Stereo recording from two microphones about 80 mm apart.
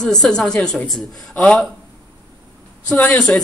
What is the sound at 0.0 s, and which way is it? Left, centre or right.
Speech, centre.